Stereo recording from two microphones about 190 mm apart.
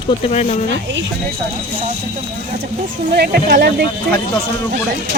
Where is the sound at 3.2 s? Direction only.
55° right (ahead or behind).